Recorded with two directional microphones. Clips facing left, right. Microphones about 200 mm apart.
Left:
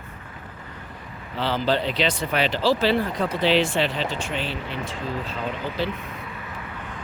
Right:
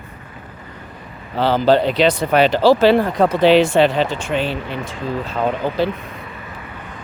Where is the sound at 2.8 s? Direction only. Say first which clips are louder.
Right 8 dB; 65° right (ahead or behind).